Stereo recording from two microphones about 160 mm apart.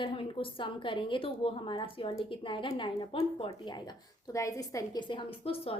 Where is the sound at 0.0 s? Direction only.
30° left (ahead or behind).